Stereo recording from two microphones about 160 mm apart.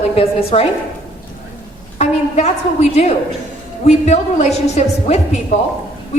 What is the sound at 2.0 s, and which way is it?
A woman's voice, 45° left (ahead or behind).